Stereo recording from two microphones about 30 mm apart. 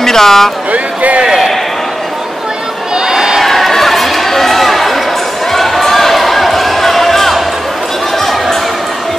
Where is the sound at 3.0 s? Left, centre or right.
Centre.